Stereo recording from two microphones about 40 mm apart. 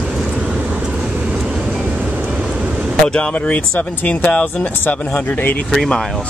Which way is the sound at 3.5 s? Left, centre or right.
Left.